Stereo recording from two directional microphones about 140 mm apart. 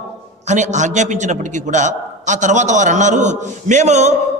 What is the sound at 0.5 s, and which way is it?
A man's voice, 60° right (ahead or behind).